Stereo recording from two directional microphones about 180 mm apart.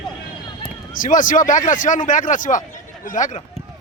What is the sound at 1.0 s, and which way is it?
A man's voice, 45° left (ahead or behind).